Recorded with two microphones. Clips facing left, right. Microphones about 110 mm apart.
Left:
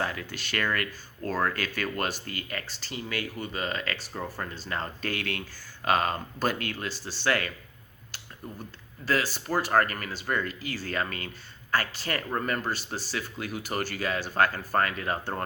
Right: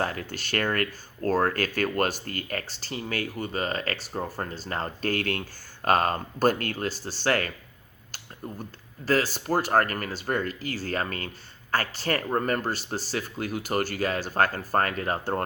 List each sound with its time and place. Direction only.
0.0 s speech: 45° right (ahead or behind)
9.0 s speech: 40° right (ahead or behind)